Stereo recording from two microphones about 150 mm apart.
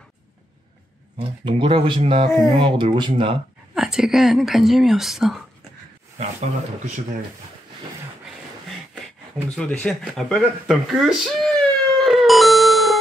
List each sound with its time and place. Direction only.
1.1 s speech: 35° right (ahead or behind)
3.7 s a woman's voice: 5° right (ahead or behind)
6.1 s speech: 50° right (ahead or behind)
9.6 s a sound: 5° left (ahead or behind)